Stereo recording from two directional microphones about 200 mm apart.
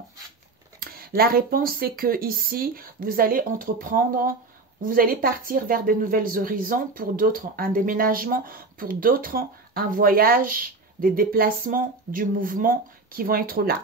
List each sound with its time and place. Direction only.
0.7 s speech: 50° right (ahead or behind)